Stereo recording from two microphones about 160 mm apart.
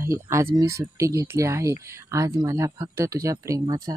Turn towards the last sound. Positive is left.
turn(degrees=-20)  # may be behind; listen again after turning